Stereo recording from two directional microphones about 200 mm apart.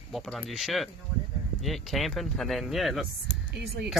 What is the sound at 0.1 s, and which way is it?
Speech, centre (ahead or behind).